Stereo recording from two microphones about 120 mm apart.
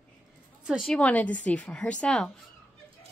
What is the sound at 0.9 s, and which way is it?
A woman's voice, 10° left (ahead or behind).